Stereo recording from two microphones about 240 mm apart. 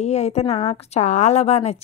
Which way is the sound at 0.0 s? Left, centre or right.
Left.